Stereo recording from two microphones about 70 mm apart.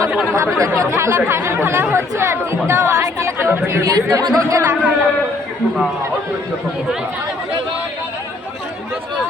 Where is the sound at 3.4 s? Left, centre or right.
Right.